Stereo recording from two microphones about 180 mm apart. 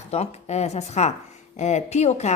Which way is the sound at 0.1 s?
35° left (ahead or behind).